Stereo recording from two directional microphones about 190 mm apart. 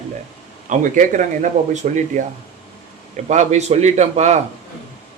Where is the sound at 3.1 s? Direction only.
40° right (ahead or behind).